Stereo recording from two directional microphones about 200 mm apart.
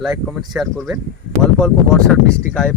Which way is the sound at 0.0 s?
Centre (ahead or behind).